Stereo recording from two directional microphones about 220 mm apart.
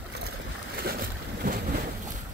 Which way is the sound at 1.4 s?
40° right (ahead or behind).